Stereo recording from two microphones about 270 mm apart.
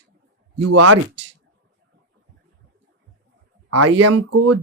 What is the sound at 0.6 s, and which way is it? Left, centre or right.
Speech, right.